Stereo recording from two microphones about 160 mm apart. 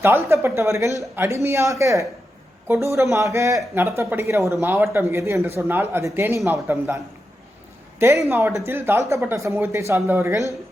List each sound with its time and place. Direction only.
0.0 s speech: 15° right (ahead or behind)